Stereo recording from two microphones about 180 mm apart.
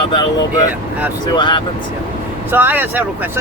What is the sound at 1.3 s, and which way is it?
Speech, 25° left (ahead or behind).